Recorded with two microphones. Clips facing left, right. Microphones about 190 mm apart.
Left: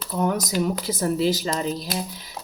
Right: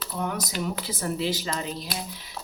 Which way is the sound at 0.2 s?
40° left (ahead or behind).